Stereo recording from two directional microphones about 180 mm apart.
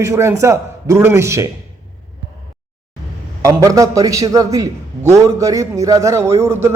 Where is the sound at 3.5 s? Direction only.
20° right (ahead or behind).